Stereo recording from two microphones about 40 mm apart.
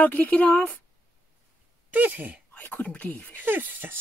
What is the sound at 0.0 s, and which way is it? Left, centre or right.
Speech, left.